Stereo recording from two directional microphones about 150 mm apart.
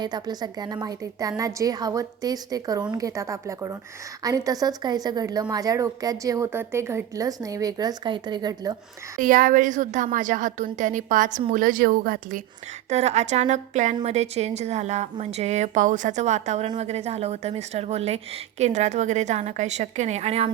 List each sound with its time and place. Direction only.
0.0 s a woman's voice: 25° right (ahead or behind)
9.2 s a woman's voice: 65° right (ahead or behind)
12.9 s a woman's voice: 45° right (ahead or behind)